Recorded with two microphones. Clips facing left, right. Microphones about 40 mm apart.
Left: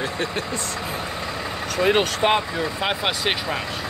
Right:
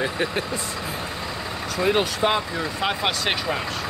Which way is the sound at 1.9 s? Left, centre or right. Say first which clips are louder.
Left 2 dB; left.